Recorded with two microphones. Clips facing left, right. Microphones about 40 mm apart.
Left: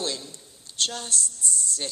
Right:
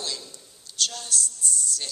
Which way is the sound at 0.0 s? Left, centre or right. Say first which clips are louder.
Left 3 dB; left.